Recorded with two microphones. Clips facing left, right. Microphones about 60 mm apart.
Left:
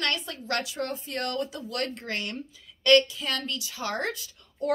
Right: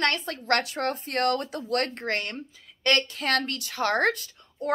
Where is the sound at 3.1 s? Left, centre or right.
Right.